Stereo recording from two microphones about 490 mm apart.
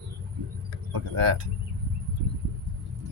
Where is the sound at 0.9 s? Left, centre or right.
Right.